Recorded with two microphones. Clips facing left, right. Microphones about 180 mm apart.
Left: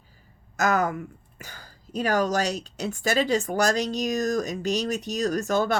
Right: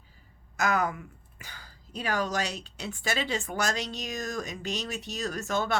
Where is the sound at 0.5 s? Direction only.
40° left (ahead or behind).